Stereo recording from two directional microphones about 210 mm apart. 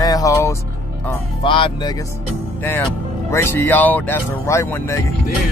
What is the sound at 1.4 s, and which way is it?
Music, 25° left (ahead or behind).